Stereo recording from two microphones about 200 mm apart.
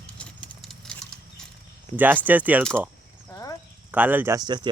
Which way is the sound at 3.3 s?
15° left (ahead or behind).